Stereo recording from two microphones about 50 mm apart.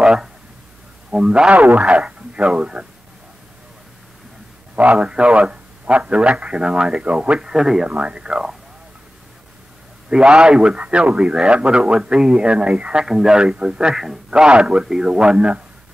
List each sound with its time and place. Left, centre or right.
0.0 s a sound: centre
1.1 s speech: centre
1.5 s a man's voice: right
4.7 s a man's voice: right
7.9 s a man's voice: right
10.0 s a man's voice: centre
13.0 s speech: centre
15.2 s a man's voice: right